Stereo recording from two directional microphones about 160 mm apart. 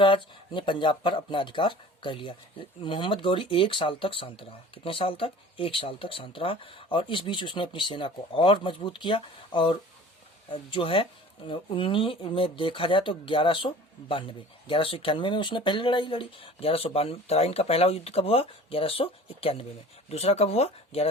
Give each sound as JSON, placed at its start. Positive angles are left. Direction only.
{"t": 0.0, "sound": "speech", "side_deg": 30}